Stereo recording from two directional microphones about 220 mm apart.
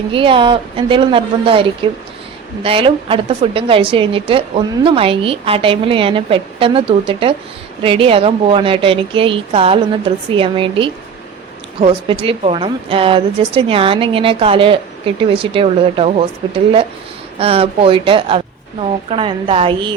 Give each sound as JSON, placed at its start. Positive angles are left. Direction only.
{"t": 0.1, "sound": "a woman's voice", "side_deg": -25}
{"t": 17.3, "sound": "a woman's voice", "side_deg": -25}